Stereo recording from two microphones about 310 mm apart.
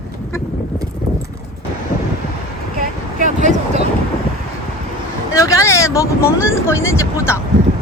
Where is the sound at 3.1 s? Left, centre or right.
Right.